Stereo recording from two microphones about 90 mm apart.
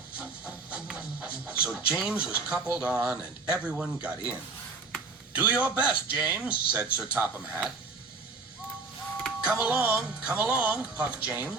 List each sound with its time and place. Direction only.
0.2 s speech: 15° right (ahead or behind)
5.3 s speech: 15° right (ahead or behind)
9.4 s speech: 15° right (ahead or behind)